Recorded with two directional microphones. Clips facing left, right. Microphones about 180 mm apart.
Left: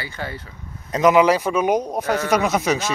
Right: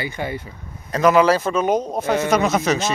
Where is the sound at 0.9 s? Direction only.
15° left (ahead or behind).